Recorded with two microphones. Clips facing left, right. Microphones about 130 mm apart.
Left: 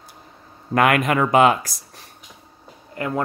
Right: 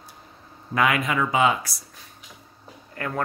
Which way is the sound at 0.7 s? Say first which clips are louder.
Left 5 dB; 60° left (ahead or behind).